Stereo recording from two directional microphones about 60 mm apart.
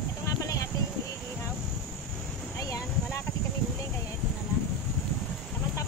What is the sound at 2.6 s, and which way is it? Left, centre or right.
Boat, left.